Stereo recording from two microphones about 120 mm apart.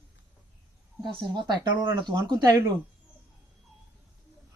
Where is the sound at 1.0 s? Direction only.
40° right (ahead or behind).